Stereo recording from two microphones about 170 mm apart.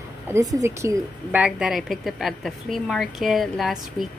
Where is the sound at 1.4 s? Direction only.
Centre (ahead or behind).